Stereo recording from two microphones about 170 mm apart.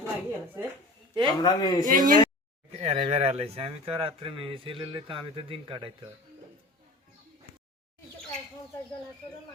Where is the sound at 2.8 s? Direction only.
35° right (ahead or behind).